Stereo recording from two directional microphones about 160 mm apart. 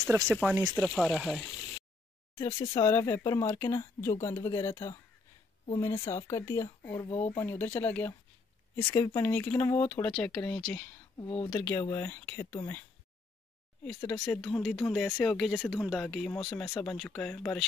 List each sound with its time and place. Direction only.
0.3 s speech: centre (ahead or behind)
2.3 s speech: 20° left (ahead or behind)
7.1 s speech: 40° left (ahead or behind)
7.3 s speech: 10° left (ahead or behind)
11.1 s speech: 30° left (ahead or behind)
11.6 s speech: 15° left (ahead or behind)
14.2 s speech: 5° left (ahead or behind)